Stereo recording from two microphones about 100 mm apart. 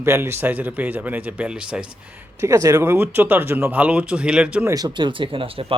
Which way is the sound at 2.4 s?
35° right (ahead or behind).